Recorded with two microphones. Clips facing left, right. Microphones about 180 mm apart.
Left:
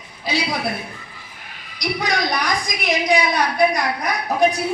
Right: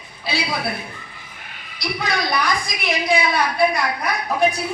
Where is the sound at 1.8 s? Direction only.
15° left (ahead or behind).